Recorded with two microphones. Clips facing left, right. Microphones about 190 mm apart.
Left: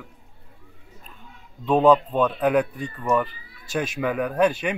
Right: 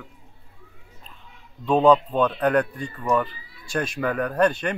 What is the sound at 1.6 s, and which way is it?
Speech, 5° left (ahead or behind).